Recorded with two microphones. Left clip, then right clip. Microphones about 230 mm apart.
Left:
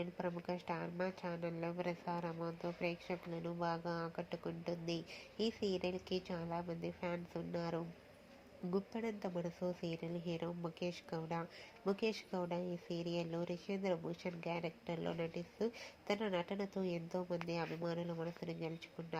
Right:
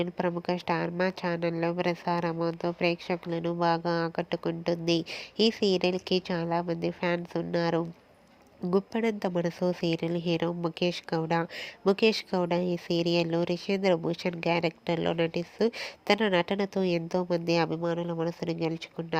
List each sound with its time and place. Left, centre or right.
0.0 s a woman's voice: right